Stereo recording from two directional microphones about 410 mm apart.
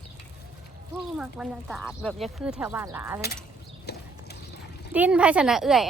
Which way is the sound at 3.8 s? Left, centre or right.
Left.